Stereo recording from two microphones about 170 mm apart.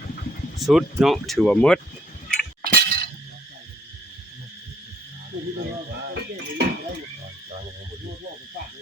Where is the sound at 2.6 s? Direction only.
60° right (ahead or behind).